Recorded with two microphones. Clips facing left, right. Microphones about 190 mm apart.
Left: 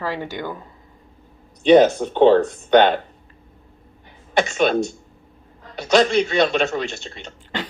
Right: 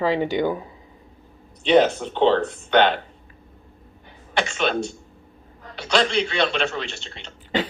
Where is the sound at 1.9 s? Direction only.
45° left (ahead or behind).